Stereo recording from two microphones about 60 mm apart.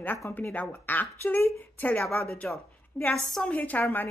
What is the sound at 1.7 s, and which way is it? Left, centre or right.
Speech, left.